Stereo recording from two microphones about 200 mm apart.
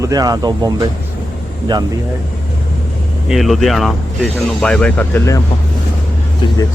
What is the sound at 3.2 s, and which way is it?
Speech, centre (ahead or behind).